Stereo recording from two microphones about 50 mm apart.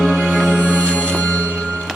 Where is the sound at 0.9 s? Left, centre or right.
Centre.